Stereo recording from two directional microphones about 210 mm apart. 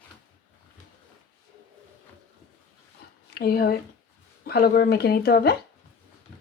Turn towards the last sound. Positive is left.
turn(degrees=45)  # may be behind; listen again after turning